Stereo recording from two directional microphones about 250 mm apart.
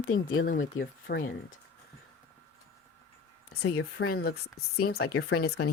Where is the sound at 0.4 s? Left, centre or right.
Left.